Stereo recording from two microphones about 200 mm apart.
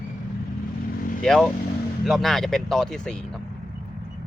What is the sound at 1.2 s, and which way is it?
Speech, centre (ahead or behind).